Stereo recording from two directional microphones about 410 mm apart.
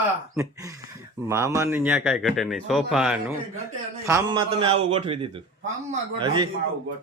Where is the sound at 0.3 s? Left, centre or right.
Centre.